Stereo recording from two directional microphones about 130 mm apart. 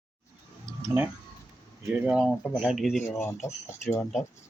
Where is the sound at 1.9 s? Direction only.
10° right (ahead or behind).